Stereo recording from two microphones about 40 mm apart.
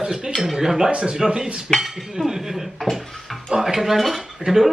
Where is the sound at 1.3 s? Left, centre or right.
Right.